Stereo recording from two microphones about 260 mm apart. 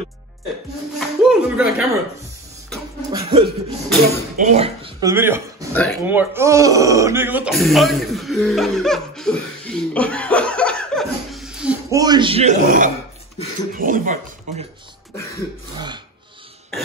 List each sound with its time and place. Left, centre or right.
0.9 s speech: centre
3.1 s speech: right
5.1 s speech: centre
5.7 s speech: centre
6.0 s speech: centre; by 14.7 s right